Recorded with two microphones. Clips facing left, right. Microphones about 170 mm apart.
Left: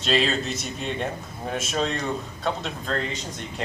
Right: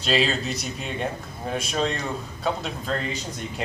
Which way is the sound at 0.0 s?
Centre (ahead or behind).